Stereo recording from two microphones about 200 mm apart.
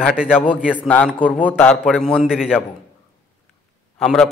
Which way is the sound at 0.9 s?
5° left (ahead or behind).